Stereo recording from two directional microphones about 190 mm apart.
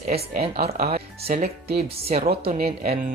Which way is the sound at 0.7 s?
35° right (ahead or behind).